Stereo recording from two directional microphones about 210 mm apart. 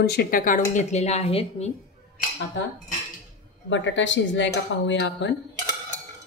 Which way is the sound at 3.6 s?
60° left (ahead or behind).